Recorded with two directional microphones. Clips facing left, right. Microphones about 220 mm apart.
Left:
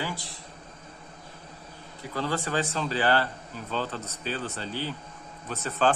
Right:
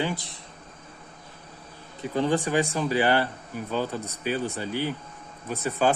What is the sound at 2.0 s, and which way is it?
A man's voice, 20° right (ahead or behind).